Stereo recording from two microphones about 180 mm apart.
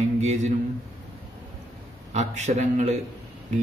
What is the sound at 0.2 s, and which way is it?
Speech, 40° right (ahead or behind).